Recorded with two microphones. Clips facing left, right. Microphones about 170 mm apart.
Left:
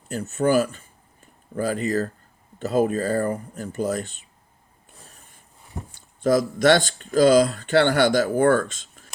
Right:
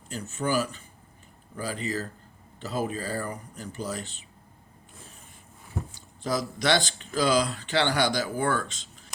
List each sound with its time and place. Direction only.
0.1 s speech: 45° left (ahead or behind)
5.9 s speech: 55° left (ahead or behind)